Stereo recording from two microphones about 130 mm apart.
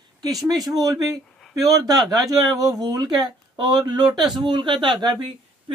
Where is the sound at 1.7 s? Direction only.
30° right (ahead or behind).